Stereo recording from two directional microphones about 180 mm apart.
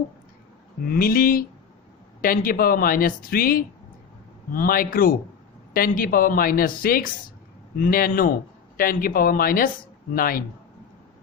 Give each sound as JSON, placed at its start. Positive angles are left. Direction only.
{"t": 0.9, "sound": "speech", "side_deg": 55}